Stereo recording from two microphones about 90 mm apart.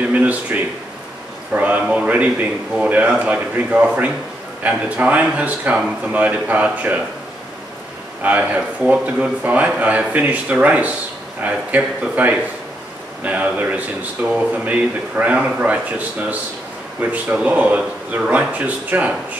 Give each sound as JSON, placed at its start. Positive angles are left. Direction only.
{"t": 0.1, "sound": "a man's voice", "side_deg": -15}
{"t": 8.2, "sound": "a man's voice", "side_deg": -20}